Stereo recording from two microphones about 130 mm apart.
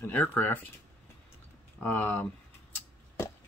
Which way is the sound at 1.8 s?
15° left (ahead or behind).